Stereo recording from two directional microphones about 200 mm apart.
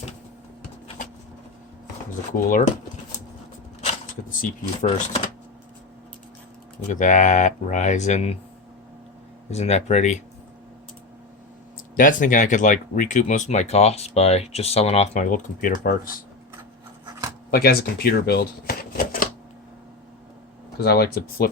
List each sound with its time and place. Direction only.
2.3 s speech: 45° left (ahead or behind)
3.8 s speech: 40° left (ahead or behind)
6.8 s speech: 40° left (ahead or behind)
9.5 s speech: 35° left (ahead or behind)
11.9 s speech: 40° left (ahead or behind)
17.5 s speech: 50° left (ahead or behind)
20.8 s speech: 50° left (ahead or behind)